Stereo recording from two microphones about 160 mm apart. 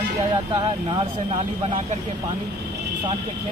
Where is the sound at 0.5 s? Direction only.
30° right (ahead or behind).